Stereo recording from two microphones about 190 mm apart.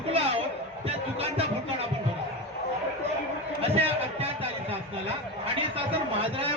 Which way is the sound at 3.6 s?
30° right (ahead or behind).